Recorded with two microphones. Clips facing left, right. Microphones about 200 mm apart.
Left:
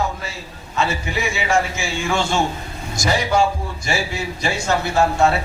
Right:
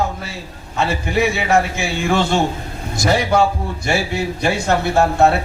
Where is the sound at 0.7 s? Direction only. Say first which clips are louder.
Right 4 dB; 55° right (ahead or behind).